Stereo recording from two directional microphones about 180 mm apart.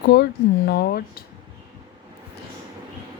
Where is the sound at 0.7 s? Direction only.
60° left (ahead or behind).